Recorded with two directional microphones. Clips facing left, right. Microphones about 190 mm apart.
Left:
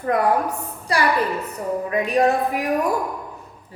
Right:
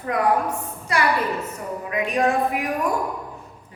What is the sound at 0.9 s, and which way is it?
A woman's voice, 35° left (ahead or behind).